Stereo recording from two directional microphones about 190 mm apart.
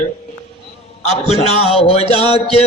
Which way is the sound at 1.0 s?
35° left (ahead or behind).